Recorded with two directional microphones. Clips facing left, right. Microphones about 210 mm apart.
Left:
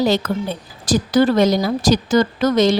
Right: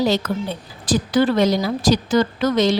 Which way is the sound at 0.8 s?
40° left (ahead or behind).